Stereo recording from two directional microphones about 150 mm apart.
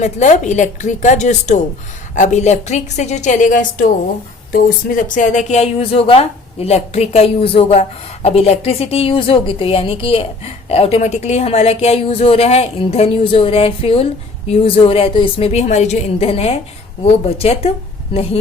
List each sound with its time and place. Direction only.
0.0 s a woman's voice: 50° left (ahead or behind)